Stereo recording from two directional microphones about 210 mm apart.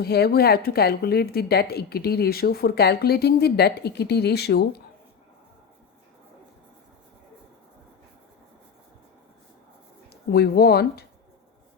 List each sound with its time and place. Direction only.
0.0 s a woman's voice: 50° left (ahead or behind)
10.1 s speech: 50° left (ahead or behind)